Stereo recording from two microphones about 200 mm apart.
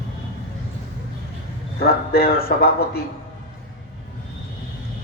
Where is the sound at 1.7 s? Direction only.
50° left (ahead or behind).